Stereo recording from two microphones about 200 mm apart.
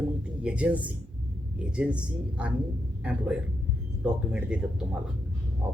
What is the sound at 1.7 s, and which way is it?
Speech, 5° right (ahead or behind).